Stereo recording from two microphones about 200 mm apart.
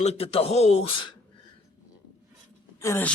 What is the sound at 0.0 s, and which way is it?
Speech, 30° left (ahead or behind).